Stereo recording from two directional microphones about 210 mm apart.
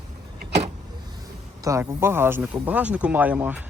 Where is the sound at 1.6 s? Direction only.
15° right (ahead or behind).